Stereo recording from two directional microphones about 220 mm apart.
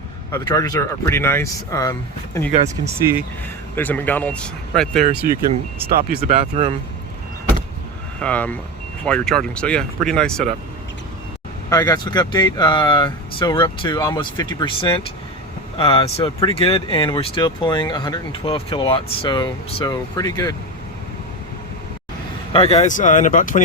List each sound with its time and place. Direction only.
0.3 s speech: 15° left (ahead or behind)
3.8 s speech: 10° left (ahead or behind)
6.0 s speech: 45° right (ahead or behind)
8.2 s speech: 5° left (ahead or behind)
11.7 s speech: 15° left (ahead or behind)
22.5 s speech: 25° left (ahead or behind)